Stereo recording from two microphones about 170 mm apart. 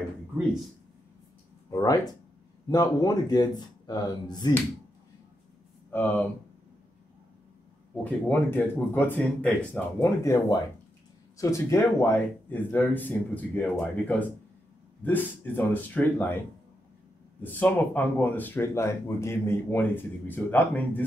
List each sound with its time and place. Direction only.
1.7 s speech: 20° left (ahead or behind)
5.9 s speech: 10° left (ahead or behind)
8.0 s speech: 10° left (ahead or behind)
17.4 s speech: 10° left (ahead or behind)